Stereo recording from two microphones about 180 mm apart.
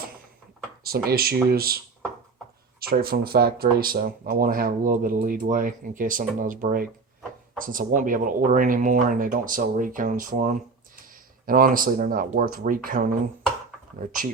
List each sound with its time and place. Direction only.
0.9 s speech: 55° right (ahead or behind)
2.8 s speech: 55° right (ahead or behind)